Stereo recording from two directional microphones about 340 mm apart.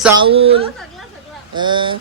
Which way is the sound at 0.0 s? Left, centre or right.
Centre.